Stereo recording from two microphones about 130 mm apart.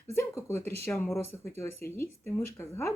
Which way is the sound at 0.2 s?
20° left (ahead or behind).